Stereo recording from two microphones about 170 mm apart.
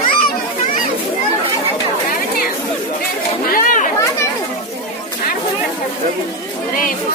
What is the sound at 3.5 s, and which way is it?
Chatter, 55° left (ahead or behind).